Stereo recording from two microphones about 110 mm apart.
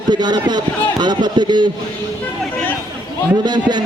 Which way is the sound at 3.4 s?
40° right (ahead or behind).